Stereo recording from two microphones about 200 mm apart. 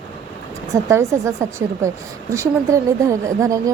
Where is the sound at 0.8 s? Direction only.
15° right (ahead or behind).